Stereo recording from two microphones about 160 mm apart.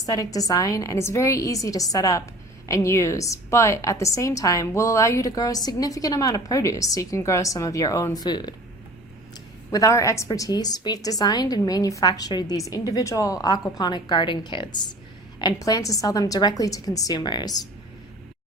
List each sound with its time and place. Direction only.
0.0 s a woman's voice: 20° left (ahead or behind)
9.7 s a woman's voice: 20° left (ahead or behind)